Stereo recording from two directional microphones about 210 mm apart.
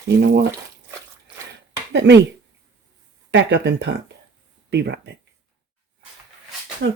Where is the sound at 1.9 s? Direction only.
55° right (ahead or behind).